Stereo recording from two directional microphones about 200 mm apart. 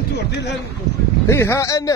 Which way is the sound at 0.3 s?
60° left (ahead or behind).